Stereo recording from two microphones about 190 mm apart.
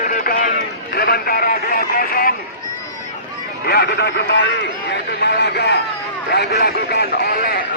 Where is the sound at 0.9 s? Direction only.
55° left (ahead or behind).